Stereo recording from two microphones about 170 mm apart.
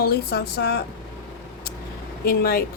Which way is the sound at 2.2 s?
60° left (ahead or behind).